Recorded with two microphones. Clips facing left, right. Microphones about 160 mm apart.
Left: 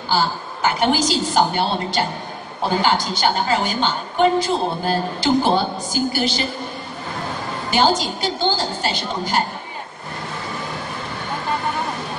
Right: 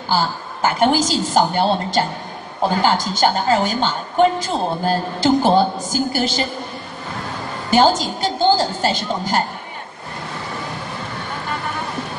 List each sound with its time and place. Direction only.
0.1 s a woman's voice: 45° right (ahead or behind)
7.7 s a woman's voice: 45° right (ahead or behind)